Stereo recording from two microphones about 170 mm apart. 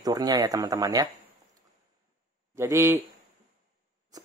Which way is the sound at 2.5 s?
15° right (ahead or behind).